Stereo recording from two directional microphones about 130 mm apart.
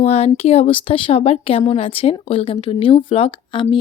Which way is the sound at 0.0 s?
55° left (ahead or behind).